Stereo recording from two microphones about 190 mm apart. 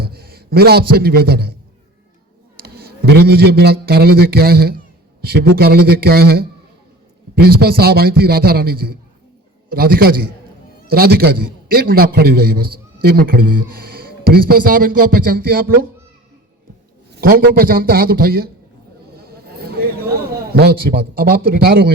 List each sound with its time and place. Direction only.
0.0 s a man's voice: 55° right (ahead or behind)
2.6 s a man's voice: 55° right (ahead or behind)
7.4 s a man's voice: 55° right (ahead or behind)
17.1 s a man's voice: 50° right (ahead or behind)
19.1 s a sound: 55° right (ahead or behind)
20.5 s a man's voice: 55° right (ahead or behind)